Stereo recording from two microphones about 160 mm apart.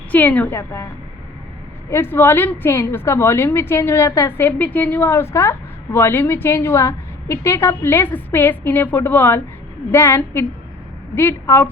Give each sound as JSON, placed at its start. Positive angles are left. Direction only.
{"t": 0.1, "sound": "a woman's voice", "side_deg": 10}
{"t": 1.9, "sound": "a woman's voice", "side_deg": 15}